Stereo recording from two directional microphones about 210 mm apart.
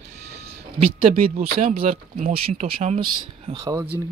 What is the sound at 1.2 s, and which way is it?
Speech, 35° right (ahead or behind).